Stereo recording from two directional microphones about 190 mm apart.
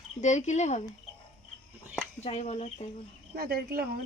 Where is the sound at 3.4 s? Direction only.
55° right (ahead or behind).